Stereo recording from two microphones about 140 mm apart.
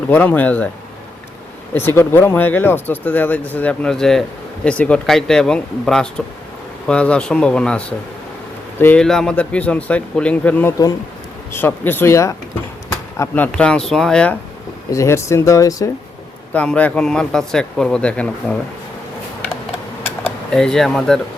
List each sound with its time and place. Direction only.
0.1 s speech: 10° left (ahead or behind)
2.0 s speech: 15° left (ahead or behind)
14.8 s speech: 20° left (ahead or behind)
16.5 s speech: 10° left (ahead or behind)
20.2 s speech: 5° left (ahead or behind)